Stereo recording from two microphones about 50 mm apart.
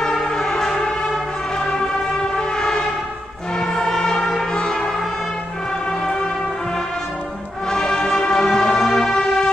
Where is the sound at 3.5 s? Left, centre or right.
Centre.